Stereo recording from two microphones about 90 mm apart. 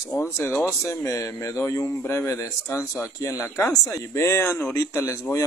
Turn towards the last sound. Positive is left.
turn(degrees=35)  # may be behind; listen again after turning